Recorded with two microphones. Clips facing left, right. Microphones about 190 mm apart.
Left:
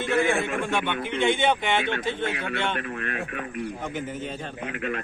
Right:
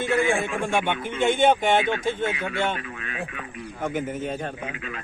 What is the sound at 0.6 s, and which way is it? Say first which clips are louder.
Speech: right 2 dB; 45° right (ahead or behind).